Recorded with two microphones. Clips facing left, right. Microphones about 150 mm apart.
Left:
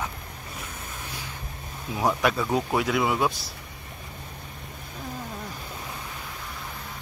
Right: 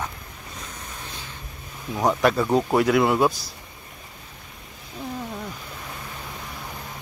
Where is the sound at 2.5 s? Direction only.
Centre (ahead or behind).